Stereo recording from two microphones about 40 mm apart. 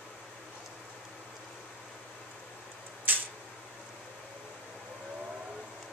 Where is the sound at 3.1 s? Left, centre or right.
Right.